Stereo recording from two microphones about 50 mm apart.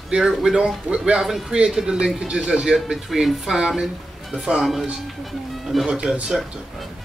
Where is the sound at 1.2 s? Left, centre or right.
Centre.